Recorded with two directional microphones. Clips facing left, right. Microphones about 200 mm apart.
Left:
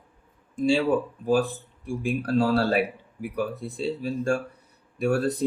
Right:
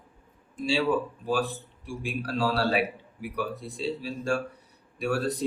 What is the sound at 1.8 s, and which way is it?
Speech, 50° left (ahead or behind).